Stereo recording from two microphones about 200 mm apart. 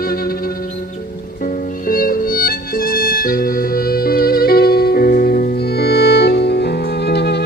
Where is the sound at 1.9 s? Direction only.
45° left (ahead or behind).